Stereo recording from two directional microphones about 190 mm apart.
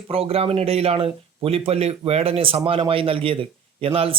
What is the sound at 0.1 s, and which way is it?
A man's voice, 30° right (ahead or behind).